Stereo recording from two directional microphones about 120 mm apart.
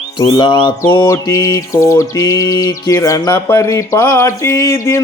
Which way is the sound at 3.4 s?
20° left (ahead or behind).